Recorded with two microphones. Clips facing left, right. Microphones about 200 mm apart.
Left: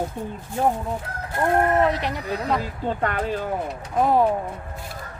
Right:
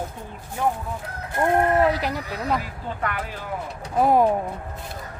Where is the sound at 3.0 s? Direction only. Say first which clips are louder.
Left 2 dB; 30° left (ahead or behind).